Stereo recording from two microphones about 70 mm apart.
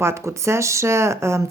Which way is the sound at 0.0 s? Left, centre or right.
Right.